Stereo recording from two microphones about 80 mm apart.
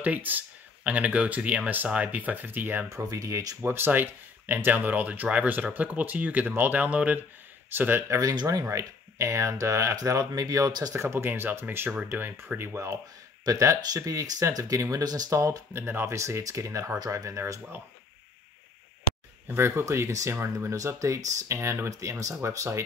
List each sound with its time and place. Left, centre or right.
0.0 s speech: right
2.9 s speech: right
3.6 s speech: right
8.2 s speech: right
11.0 s speech: right
15.3 s speech: right
15.8 s speech: right
19.4 s speech: right